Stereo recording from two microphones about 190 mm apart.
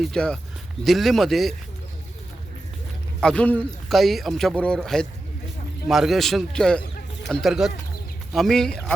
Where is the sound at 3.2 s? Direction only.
5° left (ahead or behind).